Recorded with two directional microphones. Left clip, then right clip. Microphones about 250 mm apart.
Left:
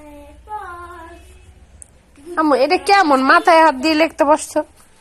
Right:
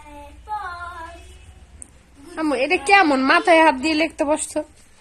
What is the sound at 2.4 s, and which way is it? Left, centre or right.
A woman's voice, centre.